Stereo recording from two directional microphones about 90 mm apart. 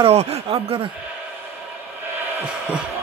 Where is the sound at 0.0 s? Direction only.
90° right.